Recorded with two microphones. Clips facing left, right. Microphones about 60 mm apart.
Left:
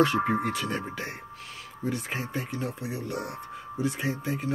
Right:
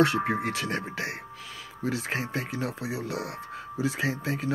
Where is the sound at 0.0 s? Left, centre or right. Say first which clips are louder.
Even; right.